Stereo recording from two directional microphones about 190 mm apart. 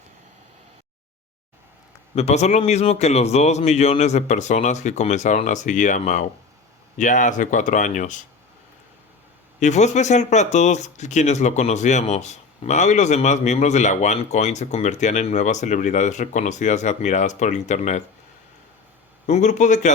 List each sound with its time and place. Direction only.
2.1 s speech: 35° left (ahead or behind)
9.6 s speech: 40° left (ahead or behind)
19.2 s speech: 40° left (ahead or behind)